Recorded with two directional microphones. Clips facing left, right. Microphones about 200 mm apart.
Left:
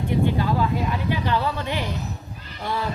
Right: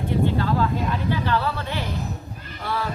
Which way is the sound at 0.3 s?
15° left (ahead or behind).